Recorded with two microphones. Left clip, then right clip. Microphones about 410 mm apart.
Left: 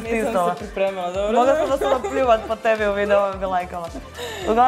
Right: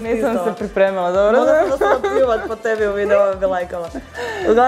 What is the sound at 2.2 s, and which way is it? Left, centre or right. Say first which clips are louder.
Speech: left 1 dB; centre.